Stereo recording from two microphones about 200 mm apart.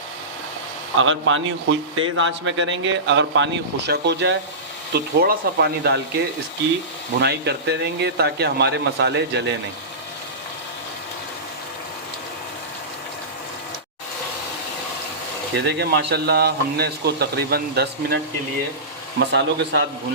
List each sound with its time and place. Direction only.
0.9 s a man's voice: 75° right (ahead or behind); by 6.0 s 55° right (ahead or behind)
7.2 s a man's voice: 55° right (ahead or behind)
15.5 s a man's voice: 55° right (ahead or behind)
19.2 s a man's voice: 60° right (ahead or behind)